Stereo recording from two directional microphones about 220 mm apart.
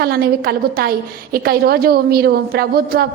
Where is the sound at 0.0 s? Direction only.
45° right (ahead or behind).